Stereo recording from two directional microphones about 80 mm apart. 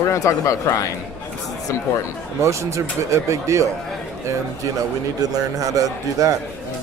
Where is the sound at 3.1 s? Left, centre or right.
Right.